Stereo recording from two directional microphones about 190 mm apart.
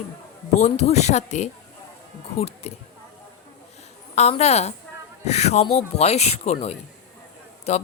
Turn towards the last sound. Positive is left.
turn(degrees=35)  # may be behind; listen again after turning